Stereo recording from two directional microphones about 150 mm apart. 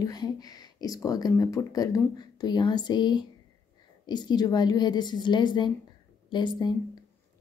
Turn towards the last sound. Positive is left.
turn(degrees=30)  # may be behind; listen again after turning